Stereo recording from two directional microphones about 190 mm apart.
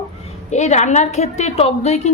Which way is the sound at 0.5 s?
35° left (ahead or behind).